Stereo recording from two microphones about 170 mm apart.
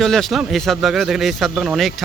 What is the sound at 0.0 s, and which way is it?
Speech, centre (ahead or behind).